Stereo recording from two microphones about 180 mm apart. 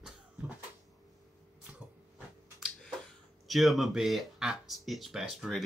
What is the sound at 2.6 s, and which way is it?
Speech, centre (ahead or behind).